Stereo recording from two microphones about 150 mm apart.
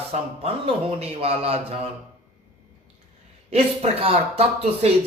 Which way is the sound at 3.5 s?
40° right (ahead or behind).